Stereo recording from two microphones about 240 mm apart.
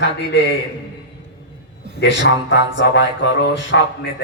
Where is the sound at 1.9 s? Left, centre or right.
Left.